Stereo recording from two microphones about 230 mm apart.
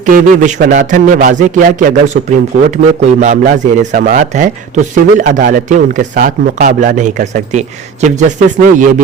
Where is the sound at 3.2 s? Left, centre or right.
Right.